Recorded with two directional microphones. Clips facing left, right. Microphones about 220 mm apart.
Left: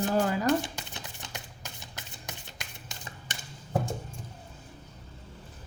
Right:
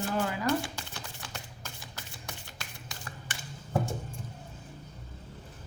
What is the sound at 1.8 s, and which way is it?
Shuffling cards, 20° left (ahead or behind).